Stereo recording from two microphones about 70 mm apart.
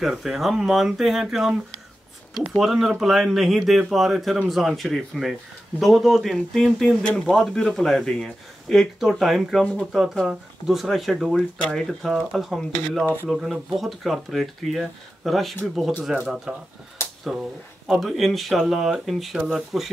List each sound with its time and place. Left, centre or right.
0.0 s speech: centre
17.2 s speech: centre